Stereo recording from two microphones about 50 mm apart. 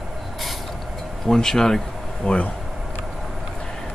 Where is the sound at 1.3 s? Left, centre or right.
Centre.